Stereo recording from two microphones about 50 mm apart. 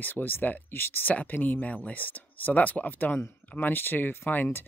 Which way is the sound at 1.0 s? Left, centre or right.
Left.